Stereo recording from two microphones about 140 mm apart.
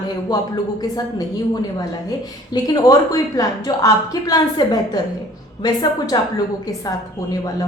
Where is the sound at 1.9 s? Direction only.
30° left (ahead or behind).